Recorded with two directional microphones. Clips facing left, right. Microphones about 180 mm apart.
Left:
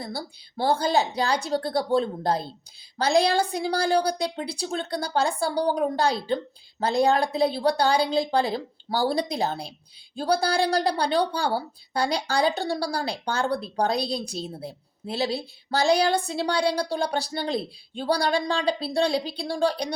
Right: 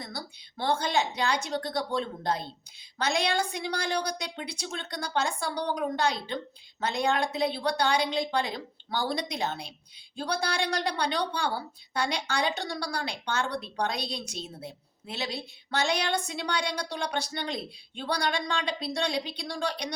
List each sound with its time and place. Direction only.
0.0 s a woman's voice: 35° left (ahead or behind)